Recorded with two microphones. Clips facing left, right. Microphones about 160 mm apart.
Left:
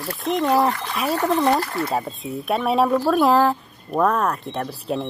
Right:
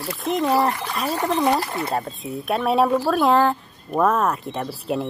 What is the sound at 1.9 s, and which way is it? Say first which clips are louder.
Speech: left 1 dB; centre (ahead or behind).